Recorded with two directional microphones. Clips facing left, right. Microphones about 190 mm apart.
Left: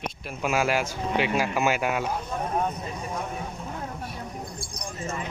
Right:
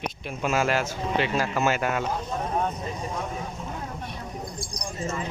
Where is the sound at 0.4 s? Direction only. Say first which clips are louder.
Even; 10° left (ahead or behind).